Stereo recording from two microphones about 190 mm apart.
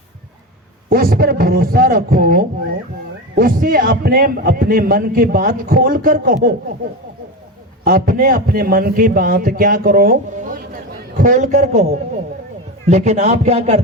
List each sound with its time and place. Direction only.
0.9 s a man's voice: 50° right (ahead or behind)
7.9 s a man's voice: 50° right (ahead or behind); by 13.8 s 35° right (ahead or behind)